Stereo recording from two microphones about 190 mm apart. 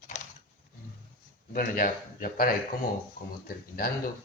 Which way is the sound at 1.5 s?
50° left (ahead or behind).